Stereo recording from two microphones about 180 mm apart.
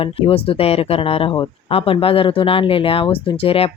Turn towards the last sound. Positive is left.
turn(degrees=30)  # may be behind; listen again after turning